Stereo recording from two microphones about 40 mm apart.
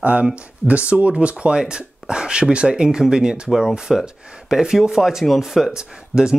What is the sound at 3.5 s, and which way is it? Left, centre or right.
Speech, centre.